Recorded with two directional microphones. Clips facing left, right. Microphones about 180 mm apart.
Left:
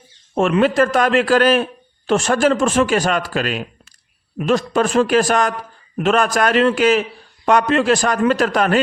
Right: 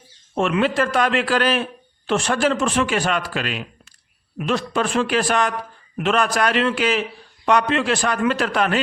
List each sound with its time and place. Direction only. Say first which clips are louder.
0.3 s speech: left 5 dB; 45° left (ahead or behind)